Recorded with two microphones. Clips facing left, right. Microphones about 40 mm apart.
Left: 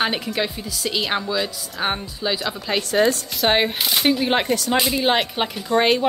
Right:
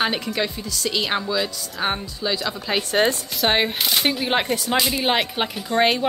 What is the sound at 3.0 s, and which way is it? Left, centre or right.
Speech, right.